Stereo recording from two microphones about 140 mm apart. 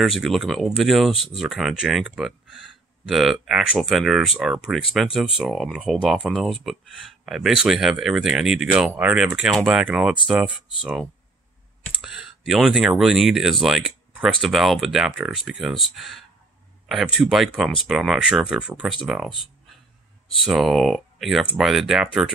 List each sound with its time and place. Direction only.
0.0 s speech: centre (ahead or behind)
1.1 s speech: 45° left (ahead or behind)
1.4 s speech: centre (ahead or behind)
20.4 s speech: centre (ahead or behind)